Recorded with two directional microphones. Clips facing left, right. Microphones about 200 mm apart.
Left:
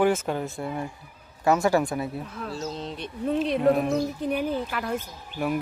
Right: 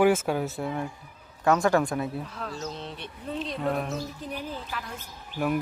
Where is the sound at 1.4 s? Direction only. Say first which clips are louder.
Left 1 dB; 5° left (ahead or behind).